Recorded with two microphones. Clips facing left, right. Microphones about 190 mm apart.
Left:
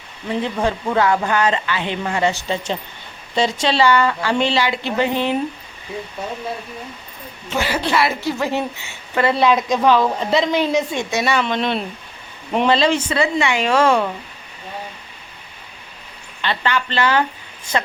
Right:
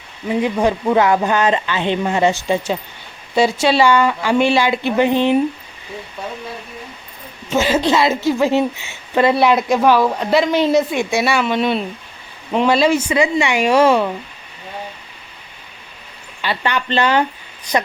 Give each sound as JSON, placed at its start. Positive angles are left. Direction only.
{"t": 0.3, "sound": "a woman's voice", "side_deg": -15}
{"t": 7.5, "sound": "a woman's voice", "side_deg": -15}
{"t": 16.4, "sound": "a woman's voice", "side_deg": -15}